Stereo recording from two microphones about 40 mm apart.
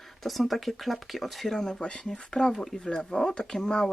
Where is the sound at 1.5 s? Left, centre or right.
Centre.